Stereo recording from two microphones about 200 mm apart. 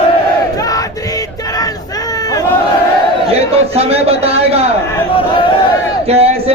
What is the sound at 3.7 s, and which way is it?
Speech, 30° right (ahead or behind).